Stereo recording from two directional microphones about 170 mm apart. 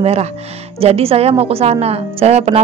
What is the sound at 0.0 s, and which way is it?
Speech, 35° right (ahead or behind).